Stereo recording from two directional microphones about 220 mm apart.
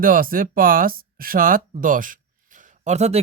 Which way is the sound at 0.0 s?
40° right (ahead or behind).